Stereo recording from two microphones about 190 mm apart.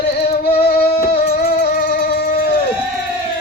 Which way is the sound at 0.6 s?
55° left (ahead or behind).